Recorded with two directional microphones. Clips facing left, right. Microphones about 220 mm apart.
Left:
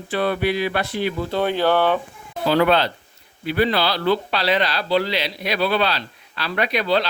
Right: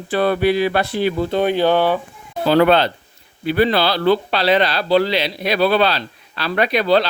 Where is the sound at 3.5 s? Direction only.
30° right (ahead or behind).